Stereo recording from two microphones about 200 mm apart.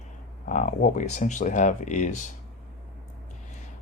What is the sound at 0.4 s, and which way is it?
Speech, 40° left (ahead or behind).